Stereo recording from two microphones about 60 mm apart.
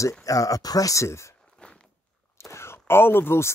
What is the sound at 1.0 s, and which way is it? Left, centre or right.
Speech, left.